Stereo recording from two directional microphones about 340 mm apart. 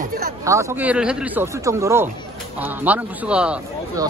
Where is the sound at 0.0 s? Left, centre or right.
Right.